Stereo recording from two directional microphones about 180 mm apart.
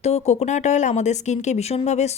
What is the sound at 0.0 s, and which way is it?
A woman's voice, 35° left (ahead or behind).